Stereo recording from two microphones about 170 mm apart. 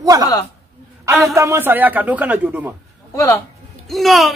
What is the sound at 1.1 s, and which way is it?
A man's voice, 15° right (ahead or behind).